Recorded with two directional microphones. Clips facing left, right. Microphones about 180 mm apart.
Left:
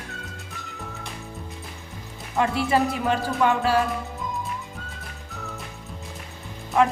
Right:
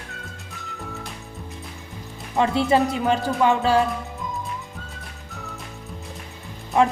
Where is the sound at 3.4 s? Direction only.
25° right (ahead or behind).